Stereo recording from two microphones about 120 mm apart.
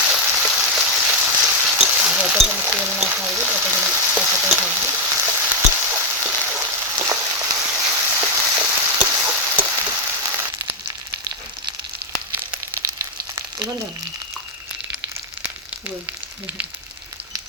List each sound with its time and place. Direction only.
0.0 s frying: 10° right (ahead or behind)
1.8 s a sound: 5° right (ahead or behind)
3.4 s frying: 10° right (ahead or behind)
4.7 s frying: 20° right (ahead or behind)
13.0 s frying: 25° right (ahead or behind)